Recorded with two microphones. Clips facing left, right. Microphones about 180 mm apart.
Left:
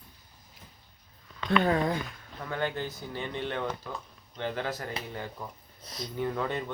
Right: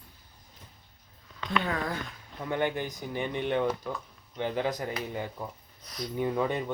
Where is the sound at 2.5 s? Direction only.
15° right (ahead or behind).